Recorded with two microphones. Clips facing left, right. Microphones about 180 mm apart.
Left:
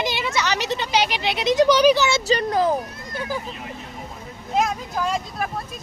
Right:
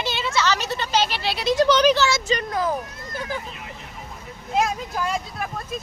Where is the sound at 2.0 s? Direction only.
30° left (ahead or behind).